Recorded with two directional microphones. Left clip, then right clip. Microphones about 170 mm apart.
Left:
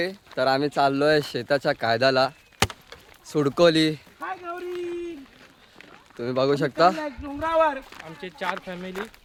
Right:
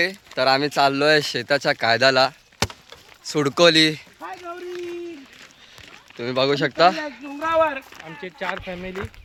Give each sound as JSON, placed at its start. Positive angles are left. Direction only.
{"t": 0.3, "sound": "speech", "side_deg": 0}
{"t": 4.2, "sound": "a sound", "side_deg": 5}
{"t": 6.1, "sound": "speech", "side_deg": 0}
{"t": 7.3, "sound": "speech", "side_deg": 55}
{"t": 8.0, "sound": "speech", "side_deg": -60}